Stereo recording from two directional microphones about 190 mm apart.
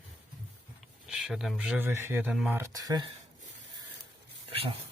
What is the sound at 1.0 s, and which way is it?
Speech, centre (ahead or behind).